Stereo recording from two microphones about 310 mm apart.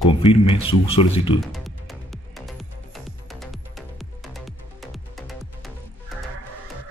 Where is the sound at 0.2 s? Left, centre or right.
Centre.